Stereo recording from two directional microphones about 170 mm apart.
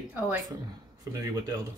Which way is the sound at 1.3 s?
25° right (ahead or behind).